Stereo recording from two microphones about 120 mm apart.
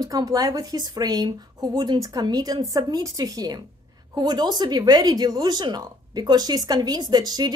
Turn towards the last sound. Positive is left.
turn(degrees=-35)  # may be behind; listen again after turning